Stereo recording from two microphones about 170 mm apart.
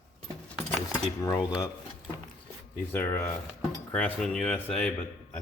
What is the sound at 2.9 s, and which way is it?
A man's voice, 15° left (ahead or behind).